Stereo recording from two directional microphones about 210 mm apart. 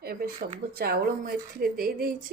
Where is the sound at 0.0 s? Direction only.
45° right (ahead or behind).